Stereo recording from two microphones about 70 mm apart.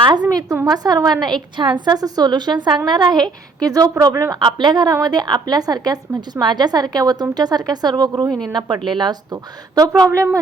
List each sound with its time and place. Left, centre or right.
0.1 s a woman's voice: right
3.6 s a woman's voice: right
4.3 s a woman's voice: right
4.9 s a woman's voice: right